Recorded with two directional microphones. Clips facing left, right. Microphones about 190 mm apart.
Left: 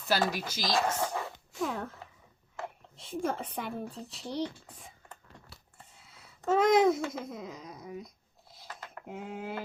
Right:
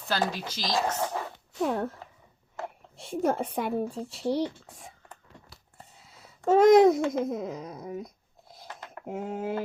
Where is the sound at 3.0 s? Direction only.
45° right (ahead or behind).